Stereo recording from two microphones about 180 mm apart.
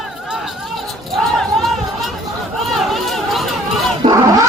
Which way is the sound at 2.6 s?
Centre (ahead or behind).